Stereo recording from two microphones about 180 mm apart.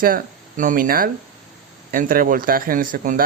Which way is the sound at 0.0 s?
50° right (ahead or behind).